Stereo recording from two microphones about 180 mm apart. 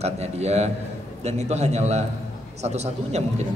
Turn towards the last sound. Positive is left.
turn(degrees=-35)  # may be behind; listen again after turning